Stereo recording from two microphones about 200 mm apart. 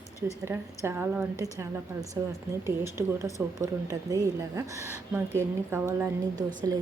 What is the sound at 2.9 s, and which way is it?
A woman's voice, 15° right (ahead or behind).